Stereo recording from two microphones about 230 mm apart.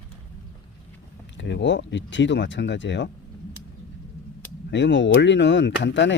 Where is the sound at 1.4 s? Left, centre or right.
Left.